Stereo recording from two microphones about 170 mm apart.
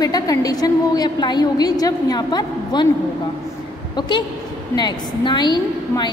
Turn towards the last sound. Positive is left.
turn(degrees=25)  # may be behind; listen again after turning